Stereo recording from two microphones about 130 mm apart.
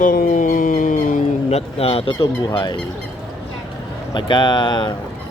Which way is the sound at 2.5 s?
35° left (ahead or behind).